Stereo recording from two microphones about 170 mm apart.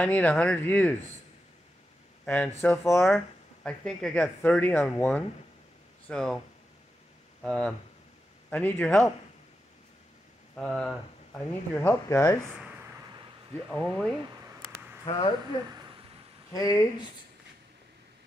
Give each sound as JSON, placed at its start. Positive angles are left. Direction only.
{"t": 0.0, "sound": "speech", "side_deg": 10}
{"t": 2.2, "sound": "speech", "side_deg": 10}
{"t": 7.4, "sound": "speech", "side_deg": 5}
{"t": 10.5, "sound": "speech", "side_deg": 5}
{"t": 13.7, "sound": "speech", "side_deg": 5}
{"t": 15.0, "sound": "speech", "side_deg": 35}
{"t": 16.5, "sound": "speech", "side_deg": 20}